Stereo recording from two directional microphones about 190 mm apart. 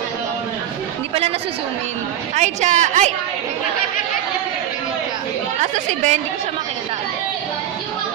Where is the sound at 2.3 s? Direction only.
40° right (ahead or behind).